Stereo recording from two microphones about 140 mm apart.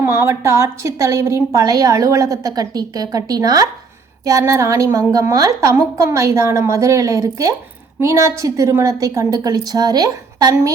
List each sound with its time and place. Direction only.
0.0 s a woman's voice: 20° right (ahead or behind)